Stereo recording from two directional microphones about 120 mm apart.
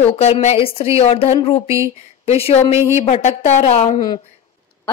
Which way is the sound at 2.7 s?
20° right (ahead or behind).